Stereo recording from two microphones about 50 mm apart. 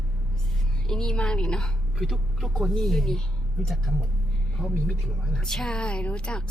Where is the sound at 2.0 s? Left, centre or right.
Centre.